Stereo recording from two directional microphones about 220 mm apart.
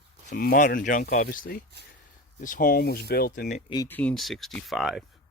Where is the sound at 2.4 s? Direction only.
35° left (ahead or behind).